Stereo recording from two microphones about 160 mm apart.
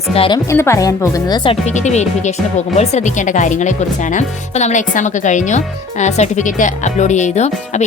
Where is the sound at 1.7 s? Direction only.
45° left (ahead or behind).